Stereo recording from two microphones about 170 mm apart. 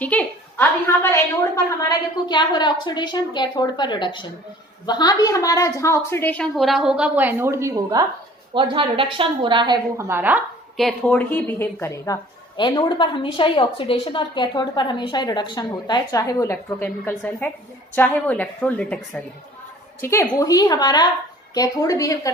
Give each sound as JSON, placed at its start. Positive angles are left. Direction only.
{"t": 0.0, "sound": "a sound", "side_deg": 10}
{"t": 1.1, "sound": "a woman's voice", "side_deg": 20}
{"t": 8.5, "sound": "a woman's voice", "side_deg": -30}
{"t": 10.1, "sound": "speech", "side_deg": -10}
{"t": 10.8, "sound": "a woman's voice", "side_deg": 0}